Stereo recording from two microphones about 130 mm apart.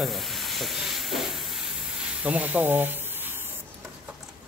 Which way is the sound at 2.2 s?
10° right (ahead or behind).